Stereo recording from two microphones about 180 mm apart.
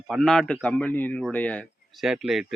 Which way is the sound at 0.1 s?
5° left (ahead or behind).